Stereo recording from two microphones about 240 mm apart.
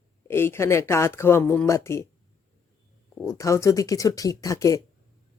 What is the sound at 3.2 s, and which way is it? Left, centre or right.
Speech, centre.